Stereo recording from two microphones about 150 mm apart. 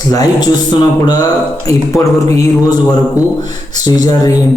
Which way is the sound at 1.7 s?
20° left (ahead or behind).